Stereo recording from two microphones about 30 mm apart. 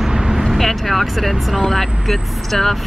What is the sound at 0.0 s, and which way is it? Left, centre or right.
Vehicle, centre.